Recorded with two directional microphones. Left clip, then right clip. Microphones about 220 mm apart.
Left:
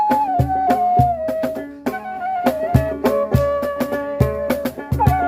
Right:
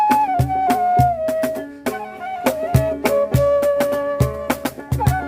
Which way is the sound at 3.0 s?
30° right (ahead or behind).